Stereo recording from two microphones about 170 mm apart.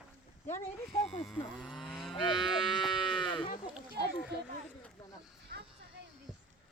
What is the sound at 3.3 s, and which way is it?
Livestock, 30° left (ahead or behind).